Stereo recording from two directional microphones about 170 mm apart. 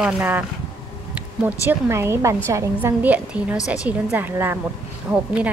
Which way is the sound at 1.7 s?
15° right (ahead or behind).